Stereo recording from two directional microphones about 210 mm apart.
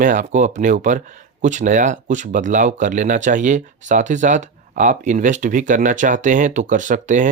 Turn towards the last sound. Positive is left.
turn(degrees=-35)  # may be behind; listen again after turning